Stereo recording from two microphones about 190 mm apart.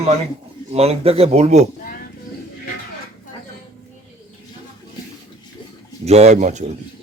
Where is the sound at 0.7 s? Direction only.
30° right (ahead or behind).